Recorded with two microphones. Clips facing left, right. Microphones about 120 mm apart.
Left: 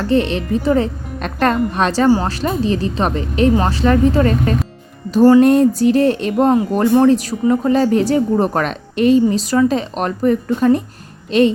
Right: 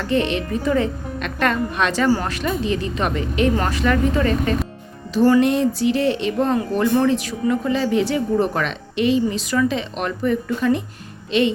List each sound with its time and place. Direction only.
0.0 s a woman's voice: 35° left (ahead or behind)